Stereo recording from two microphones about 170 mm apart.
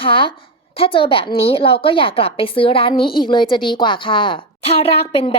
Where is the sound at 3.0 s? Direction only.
60° left (ahead or behind).